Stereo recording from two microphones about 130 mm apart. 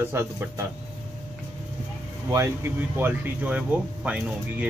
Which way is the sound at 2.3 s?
20° right (ahead or behind).